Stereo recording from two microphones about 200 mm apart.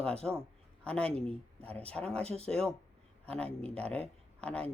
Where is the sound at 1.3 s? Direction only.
5° left (ahead or behind).